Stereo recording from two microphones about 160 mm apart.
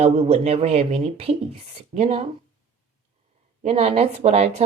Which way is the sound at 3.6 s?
40° right (ahead or behind).